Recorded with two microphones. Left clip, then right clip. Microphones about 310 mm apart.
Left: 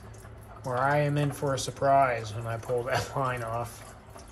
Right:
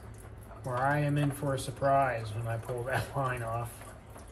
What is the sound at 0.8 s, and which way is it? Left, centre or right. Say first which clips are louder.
Speech: left 4 dB; left.